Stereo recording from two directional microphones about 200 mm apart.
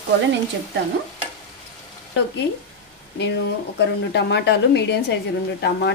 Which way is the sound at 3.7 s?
60° left (ahead or behind).